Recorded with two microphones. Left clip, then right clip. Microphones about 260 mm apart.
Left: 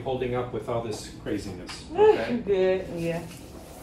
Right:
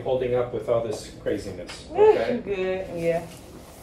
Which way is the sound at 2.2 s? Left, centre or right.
Centre.